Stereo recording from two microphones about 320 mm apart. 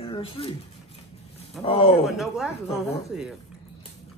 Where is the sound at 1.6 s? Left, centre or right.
Centre.